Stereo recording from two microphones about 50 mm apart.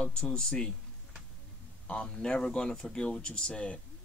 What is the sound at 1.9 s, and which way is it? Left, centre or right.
Speech, left.